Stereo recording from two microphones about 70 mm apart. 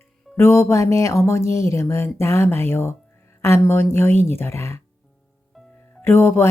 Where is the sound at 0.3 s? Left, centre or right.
Left.